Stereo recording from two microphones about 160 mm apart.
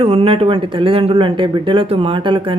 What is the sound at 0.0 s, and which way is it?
Speech, 40° right (ahead or behind).